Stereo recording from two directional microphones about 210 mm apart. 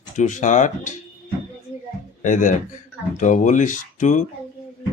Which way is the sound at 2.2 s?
35° left (ahead or behind).